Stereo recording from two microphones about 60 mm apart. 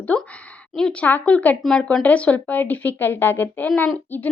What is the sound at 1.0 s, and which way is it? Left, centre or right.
Speech, left.